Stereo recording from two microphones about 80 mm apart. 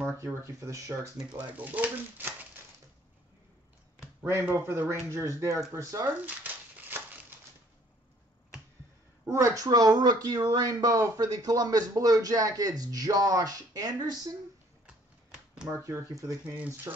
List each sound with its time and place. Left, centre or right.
0.3 s speech: right
1.6 s speech: right
4.2 s speech: right
6.2 s dog: right
9.3 s speech: right
9.7 s speech: right
14.9 s typewriter: centre
15.8 s speech: right
16.4 s speech: right